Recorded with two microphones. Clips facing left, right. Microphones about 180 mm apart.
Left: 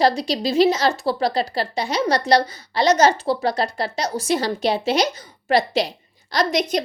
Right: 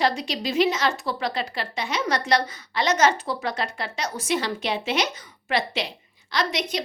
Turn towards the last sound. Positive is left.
turn(degrees=40)  # may be behind; listen again after turning